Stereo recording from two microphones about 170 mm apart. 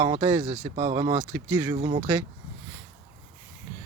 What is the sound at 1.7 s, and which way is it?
Speech, 35° right (ahead or behind).